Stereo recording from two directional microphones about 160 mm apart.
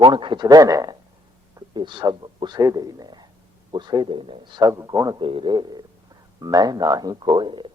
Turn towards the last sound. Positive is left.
turn(degrees=-30)  # may be behind; listen again after turning